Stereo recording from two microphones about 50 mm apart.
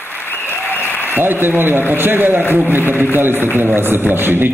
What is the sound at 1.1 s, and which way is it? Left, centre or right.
A man's voice, right.